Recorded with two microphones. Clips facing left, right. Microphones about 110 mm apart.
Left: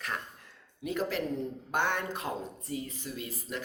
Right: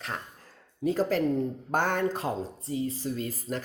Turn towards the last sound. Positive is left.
turn(degrees=-40)  # may be behind; listen again after turning